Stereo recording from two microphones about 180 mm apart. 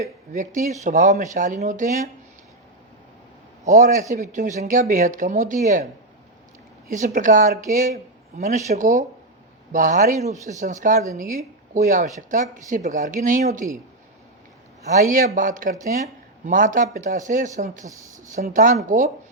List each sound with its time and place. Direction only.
0.0 s speech: 45° right (ahead or behind)
4.1 s speech: 45° right (ahead or behind)
14.9 s speech: 45° right (ahead or behind)
17.8 s speech: 20° right (ahead or behind)
18.3 s speech: 50° right (ahead or behind)